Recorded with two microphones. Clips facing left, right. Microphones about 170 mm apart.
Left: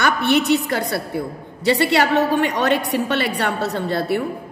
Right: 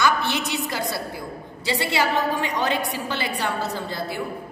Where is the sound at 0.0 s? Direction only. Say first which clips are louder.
Left 5 dB; 60° left (ahead or behind).